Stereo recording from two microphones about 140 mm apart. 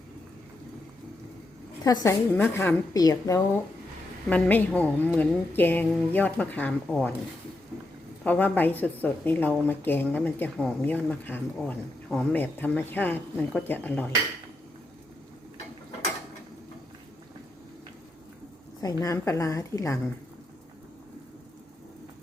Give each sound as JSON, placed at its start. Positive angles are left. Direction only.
{"t": 1.8, "sound": "a woman's voice", "side_deg": 25}
{"t": 2.3, "sound": "a woman's voice", "side_deg": 15}
{"t": 2.9, "sound": "a woman's voice", "side_deg": 25}
{"t": 4.3, "sound": "a woman's voice", "side_deg": 10}
{"t": 8.2, "sound": "a woman's voice", "side_deg": 10}
{"t": 18.8, "sound": "a woman's voice", "side_deg": 25}